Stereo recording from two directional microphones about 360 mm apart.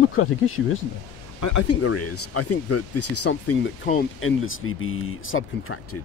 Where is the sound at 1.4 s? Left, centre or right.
Left.